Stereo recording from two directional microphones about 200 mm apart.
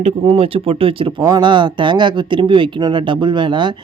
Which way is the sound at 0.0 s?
30° right (ahead or behind).